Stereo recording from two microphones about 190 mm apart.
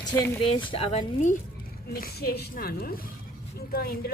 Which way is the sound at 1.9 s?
55° left (ahead or behind).